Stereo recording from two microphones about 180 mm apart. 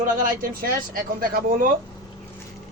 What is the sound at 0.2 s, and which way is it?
Speech, 55° right (ahead or behind).